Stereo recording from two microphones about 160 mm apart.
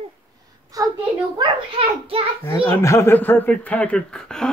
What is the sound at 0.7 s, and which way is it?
A child's voice, 20° right (ahead or behind).